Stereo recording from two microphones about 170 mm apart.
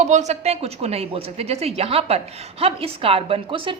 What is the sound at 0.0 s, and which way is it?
Speech, 40° right (ahead or behind).